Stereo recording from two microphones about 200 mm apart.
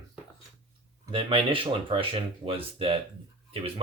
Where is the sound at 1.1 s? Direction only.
25° right (ahead or behind).